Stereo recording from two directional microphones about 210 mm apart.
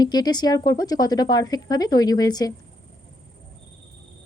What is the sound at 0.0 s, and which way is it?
A woman's voice, 20° left (ahead or behind).